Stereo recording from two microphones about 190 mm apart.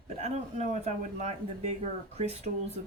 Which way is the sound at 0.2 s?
35° right (ahead or behind).